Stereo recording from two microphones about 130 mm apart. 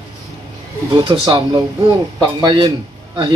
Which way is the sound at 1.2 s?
30° right (ahead or behind).